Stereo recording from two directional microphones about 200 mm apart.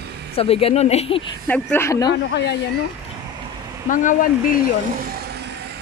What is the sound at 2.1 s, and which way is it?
Speech, 55° left (ahead or behind).